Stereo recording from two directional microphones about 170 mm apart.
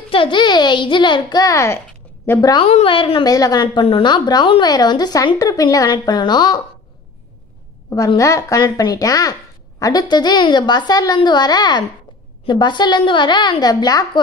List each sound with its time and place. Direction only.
0.1 s a woman's voice: 30° left (ahead or behind)
1.9 s a sound: 15° left (ahead or behind)
2.5 s a woman's voice: 35° left (ahead or behind)
7.9 s a woman's voice: 20° left (ahead or behind)